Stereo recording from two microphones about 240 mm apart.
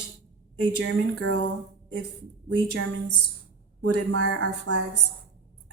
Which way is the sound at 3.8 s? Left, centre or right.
Right.